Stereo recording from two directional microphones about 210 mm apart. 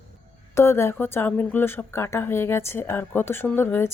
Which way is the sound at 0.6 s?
10° left (ahead or behind).